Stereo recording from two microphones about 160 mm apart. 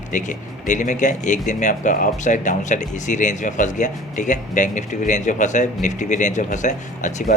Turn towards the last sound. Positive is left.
turn(degrees=50)  # may be behind; listen again after turning